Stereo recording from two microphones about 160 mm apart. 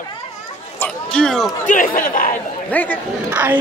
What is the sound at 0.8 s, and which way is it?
Speech, 5° left (ahead or behind).